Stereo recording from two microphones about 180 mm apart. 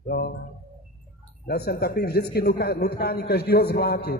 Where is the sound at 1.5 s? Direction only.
60° left (ahead or behind).